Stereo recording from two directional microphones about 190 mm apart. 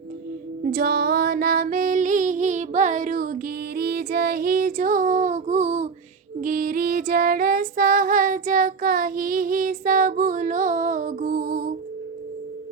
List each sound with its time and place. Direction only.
0.6 s music: 50° right (ahead or behind); by 5.9 s 35° right (ahead or behind)
6.4 s female singing: 50° right (ahead or behind)